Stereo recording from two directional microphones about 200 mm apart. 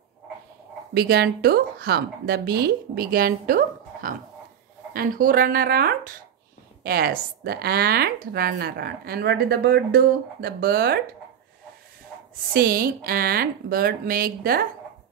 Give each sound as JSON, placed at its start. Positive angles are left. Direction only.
{"t": 0.9, "sound": "speech", "side_deg": -50}
{"t": 12.5, "sound": "speech", "side_deg": -45}